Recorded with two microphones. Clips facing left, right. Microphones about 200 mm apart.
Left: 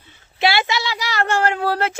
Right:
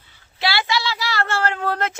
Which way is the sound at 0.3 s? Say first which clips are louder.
Left 3 dB; 20° left (ahead or behind).